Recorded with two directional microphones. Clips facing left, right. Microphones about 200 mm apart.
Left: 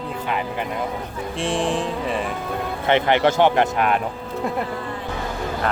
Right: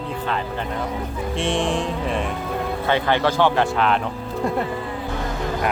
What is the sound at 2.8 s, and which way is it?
Speech, 20° left (ahead or behind).